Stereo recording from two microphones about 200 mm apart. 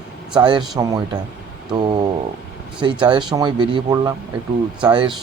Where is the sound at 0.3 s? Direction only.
25° right (ahead or behind).